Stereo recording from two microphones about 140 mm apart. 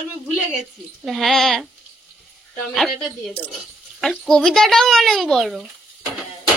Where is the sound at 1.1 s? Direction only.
Centre (ahead or behind).